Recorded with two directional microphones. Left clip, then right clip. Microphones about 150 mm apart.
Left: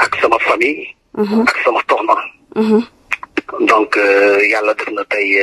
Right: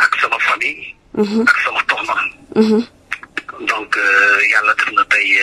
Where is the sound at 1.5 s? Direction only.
30° left (ahead or behind).